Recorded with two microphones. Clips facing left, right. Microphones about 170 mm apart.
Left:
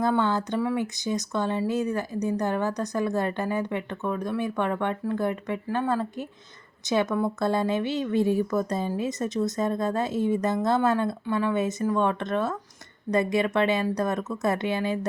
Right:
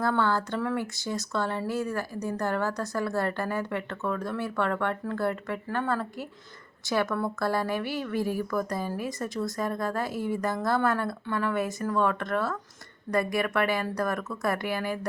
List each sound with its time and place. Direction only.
0.0 s speech: 20° left (ahead or behind)